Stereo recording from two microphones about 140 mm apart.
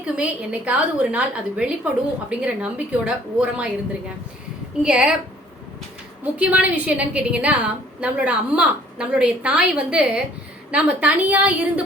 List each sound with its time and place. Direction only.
0.0 s a woman's voice: 10° right (ahead or behind)
4.8 s a woman's voice: 5° right (ahead or behind)
6.3 s a woman's voice: 10° right (ahead or behind)